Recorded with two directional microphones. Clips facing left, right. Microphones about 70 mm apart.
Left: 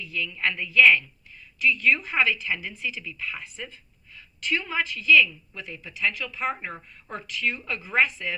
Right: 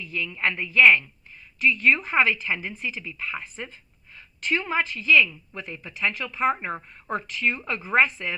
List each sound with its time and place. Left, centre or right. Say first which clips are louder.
0.0 s a woman's voice: right 1 dB; right